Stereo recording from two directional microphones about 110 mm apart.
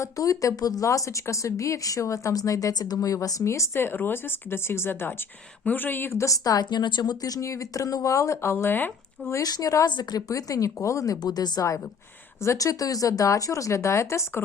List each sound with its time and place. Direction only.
0.0 s speech: 30° left (ahead or behind)
9.3 s speech: 35° left (ahead or behind)